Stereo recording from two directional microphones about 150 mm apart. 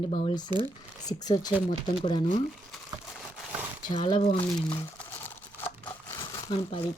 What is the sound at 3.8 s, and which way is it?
Speech, 35° left (ahead or behind).